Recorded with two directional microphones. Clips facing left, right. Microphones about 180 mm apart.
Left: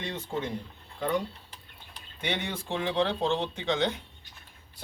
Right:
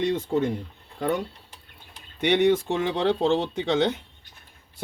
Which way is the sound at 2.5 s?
45° right (ahead or behind).